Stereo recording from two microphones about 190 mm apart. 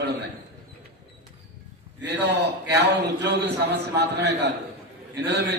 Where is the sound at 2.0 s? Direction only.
60° right (ahead or behind).